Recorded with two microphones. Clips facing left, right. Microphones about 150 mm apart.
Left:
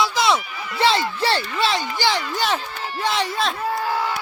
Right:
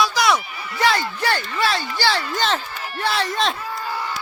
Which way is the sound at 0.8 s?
25° left (ahead or behind).